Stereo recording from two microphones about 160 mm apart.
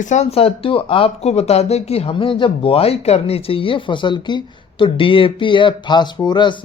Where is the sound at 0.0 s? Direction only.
45° left (ahead or behind).